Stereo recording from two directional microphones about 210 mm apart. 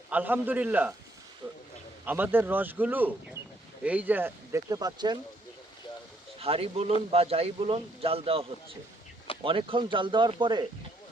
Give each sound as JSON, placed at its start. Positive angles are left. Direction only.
{"t": 0.1, "sound": "speech", "side_deg": -10}
{"t": 2.0, "sound": "speech", "side_deg": -10}
{"t": 6.4, "sound": "speech", "side_deg": -25}